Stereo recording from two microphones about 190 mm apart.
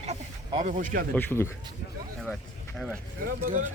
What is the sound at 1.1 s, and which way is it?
Speech, 10° left (ahead or behind).